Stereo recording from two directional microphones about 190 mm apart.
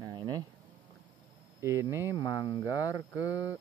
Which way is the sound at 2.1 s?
25° left (ahead or behind).